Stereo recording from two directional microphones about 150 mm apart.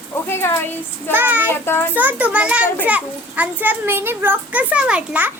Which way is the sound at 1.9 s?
10° right (ahead or behind).